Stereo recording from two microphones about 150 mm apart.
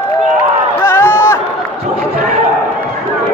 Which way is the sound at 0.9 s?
15° left (ahead or behind).